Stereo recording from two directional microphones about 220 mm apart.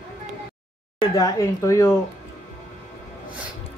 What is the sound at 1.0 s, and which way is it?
Speech, 15° left (ahead or behind).